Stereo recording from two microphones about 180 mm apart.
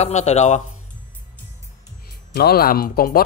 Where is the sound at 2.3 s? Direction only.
60° left (ahead or behind).